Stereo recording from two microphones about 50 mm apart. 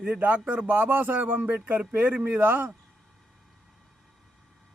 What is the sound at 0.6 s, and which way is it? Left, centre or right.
Speech, right.